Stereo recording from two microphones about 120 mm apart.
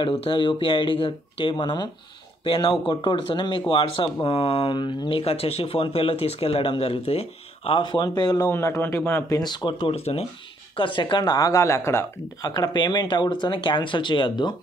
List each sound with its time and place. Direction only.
0.2 s a man's voice: 45° left (ahead or behind); by 9.2 s 15° left (ahead or behind)
9.3 s speech: 35° left (ahead or behind)
9.9 s speech: 60° left (ahead or behind)
10.8 s speech: 40° left (ahead or behind)